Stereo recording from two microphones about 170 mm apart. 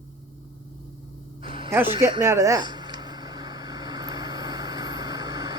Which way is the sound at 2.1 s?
15° right (ahead or behind).